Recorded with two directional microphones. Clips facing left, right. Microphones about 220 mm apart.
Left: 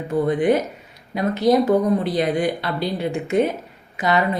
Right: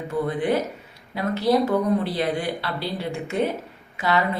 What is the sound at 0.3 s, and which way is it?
A woman's voice, 20° left (ahead or behind).